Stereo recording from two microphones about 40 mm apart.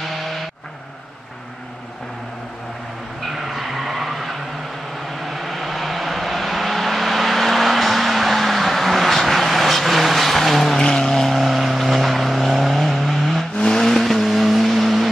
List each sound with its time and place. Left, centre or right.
3.3 s vehicle: centre
5.3 s vehicle: centre
13.6 s vehicle: centre
13.8 s vehicle: centre